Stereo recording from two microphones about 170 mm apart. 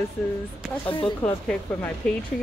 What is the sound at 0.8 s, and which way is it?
Speech, 30° left (ahead or behind).